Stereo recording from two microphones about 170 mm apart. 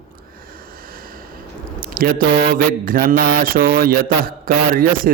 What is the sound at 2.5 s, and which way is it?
Mantra, 55° right (ahead or behind).